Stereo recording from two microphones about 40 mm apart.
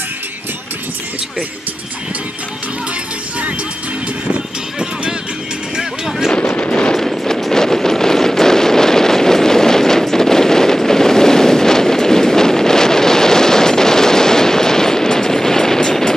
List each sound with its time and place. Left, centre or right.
6.3 s a sound: left
7.0 s vehicle: centre
7.5 s wind noise: centre